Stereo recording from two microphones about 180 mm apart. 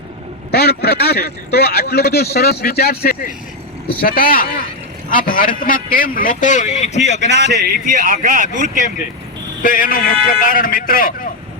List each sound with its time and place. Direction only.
0.5 s a man's voice: 65° left (ahead or behind); by 7.6 s 40° left (ahead or behind)
7.7 s speech: 50° right (ahead or behind)
9.6 s a man's voice: 50° left (ahead or behind)